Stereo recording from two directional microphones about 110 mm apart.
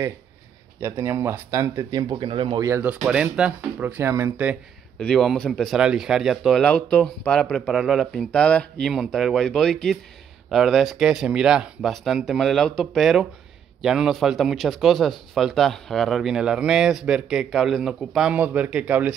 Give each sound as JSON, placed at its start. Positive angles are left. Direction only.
{"t": 0.7, "sound": "speech", "side_deg": -25}
{"t": 1.9, "sound": "speech", "side_deg": -40}
{"t": 2.6, "sound": "speech", "side_deg": -20}
{"t": 4.9, "sound": "speech", "side_deg": 5}
{"t": 6.6, "sound": "speech", "side_deg": 10}
{"t": 8.9, "sound": "speech", "side_deg": -5}